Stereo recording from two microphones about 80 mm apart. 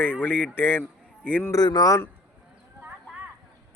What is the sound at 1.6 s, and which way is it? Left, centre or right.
Speech, left.